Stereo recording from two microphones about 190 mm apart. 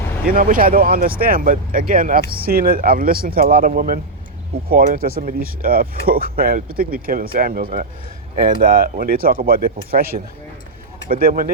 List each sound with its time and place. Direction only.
0.3 s speech: 50° right (ahead or behind)
11.1 s speech: 50° right (ahead or behind)